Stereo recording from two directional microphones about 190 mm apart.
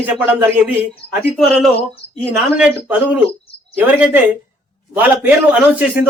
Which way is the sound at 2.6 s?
5° right (ahead or behind).